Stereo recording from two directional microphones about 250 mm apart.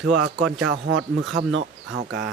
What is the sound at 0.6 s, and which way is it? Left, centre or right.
Speech, right.